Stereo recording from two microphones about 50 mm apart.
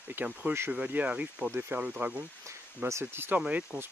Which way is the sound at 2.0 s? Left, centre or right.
Right.